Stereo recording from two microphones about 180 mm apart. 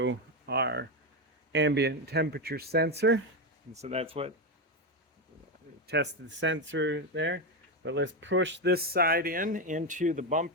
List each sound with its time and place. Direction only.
0.0 s a sound: 80° right
1.5 s speech: 75° right (ahead or behind)
3.8 s speech: 35° right (ahead or behind)
5.9 s speech: 80° right; by 10.4 s 45° right (ahead or behind)